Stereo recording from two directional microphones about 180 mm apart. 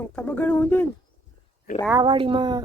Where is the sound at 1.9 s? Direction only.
25° right (ahead or behind).